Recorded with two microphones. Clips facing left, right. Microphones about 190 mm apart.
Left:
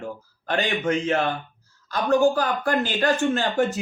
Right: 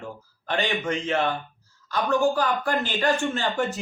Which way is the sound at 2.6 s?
45° left (ahead or behind).